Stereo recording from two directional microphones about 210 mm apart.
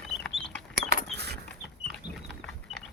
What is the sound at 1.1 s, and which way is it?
Chicken, 50° right (ahead or behind).